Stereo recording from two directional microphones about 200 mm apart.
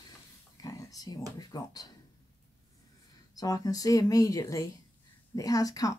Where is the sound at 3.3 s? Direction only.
20° left (ahead or behind).